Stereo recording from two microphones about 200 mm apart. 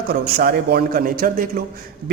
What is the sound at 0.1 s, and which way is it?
A man's voice, 50° right (ahead or behind).